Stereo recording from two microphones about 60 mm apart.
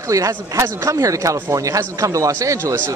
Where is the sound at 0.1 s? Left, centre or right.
Right.